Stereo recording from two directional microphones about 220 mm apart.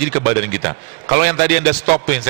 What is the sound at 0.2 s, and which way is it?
Speech, 25° right (ahead or behind).